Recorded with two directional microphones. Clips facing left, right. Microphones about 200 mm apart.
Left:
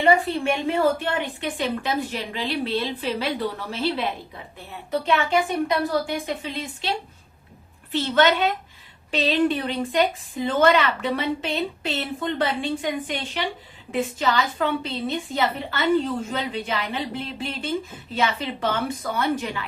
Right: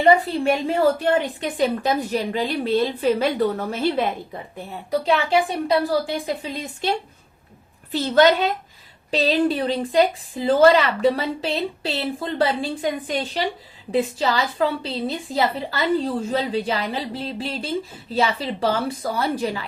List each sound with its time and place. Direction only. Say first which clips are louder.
0.1 s a woman's voice: right 4 dB; 35° right (ahead or behind)
4.5 s a woman's voice: right 3 dB; 35° right (ahead or behind)
7.9 s a woman's voice: right 4 dB; 35° right (ahead or behind)